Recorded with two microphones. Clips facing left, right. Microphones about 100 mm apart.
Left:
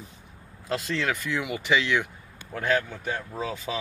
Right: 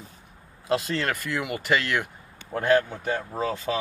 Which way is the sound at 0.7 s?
55° right (ahead or behind).